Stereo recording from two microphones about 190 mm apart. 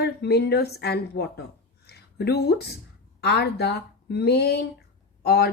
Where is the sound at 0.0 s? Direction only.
60° left (ahead or behind).